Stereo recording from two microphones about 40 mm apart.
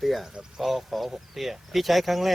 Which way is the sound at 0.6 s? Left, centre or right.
Centre.